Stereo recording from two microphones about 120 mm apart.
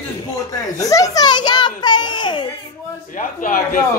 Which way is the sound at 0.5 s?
30° left (ahead or behind).